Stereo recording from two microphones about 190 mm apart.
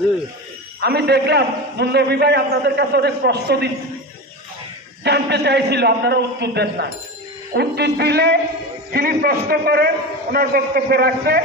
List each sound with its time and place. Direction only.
0.7 s a man's voice: 60° right (ahead or behind)
5.0 s a man's voice: 60° right (ahead or behind)